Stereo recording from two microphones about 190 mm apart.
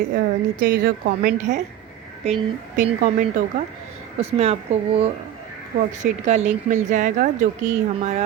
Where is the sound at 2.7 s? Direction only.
45° right (ahead or behind).